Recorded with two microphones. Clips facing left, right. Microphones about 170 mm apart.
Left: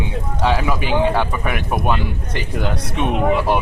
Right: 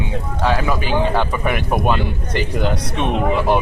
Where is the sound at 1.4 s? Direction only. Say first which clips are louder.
Right 2 dB; centre (ahead or behind).